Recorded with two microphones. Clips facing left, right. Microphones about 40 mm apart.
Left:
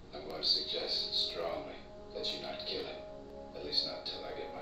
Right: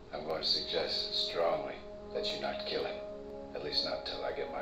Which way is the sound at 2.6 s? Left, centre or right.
Right.